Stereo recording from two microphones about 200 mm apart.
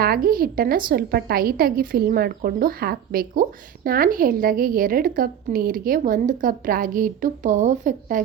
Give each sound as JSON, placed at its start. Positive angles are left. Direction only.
{"t": 0.0, "sound": "speech", "side_deg": -50}